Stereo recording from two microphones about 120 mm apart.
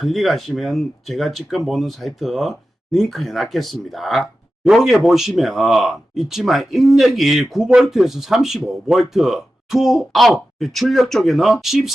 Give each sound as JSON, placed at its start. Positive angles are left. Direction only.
{"t": 0.0, "sound": "speech", "side_deg": 0}